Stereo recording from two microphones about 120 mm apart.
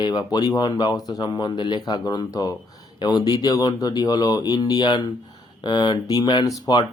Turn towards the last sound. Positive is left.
turn(degrees=35)  # may be behind; listen again after turning